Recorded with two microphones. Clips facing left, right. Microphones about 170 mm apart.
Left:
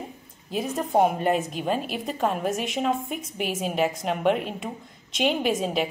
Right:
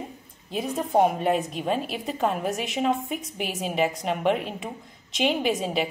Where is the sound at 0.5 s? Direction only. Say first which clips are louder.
Even; centre (ahead or behind).